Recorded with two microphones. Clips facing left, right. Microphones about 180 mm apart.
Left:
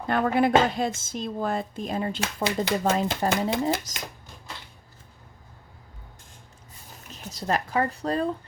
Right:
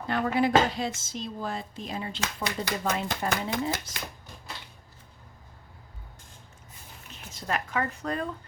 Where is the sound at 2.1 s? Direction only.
30° left (ahead or behind).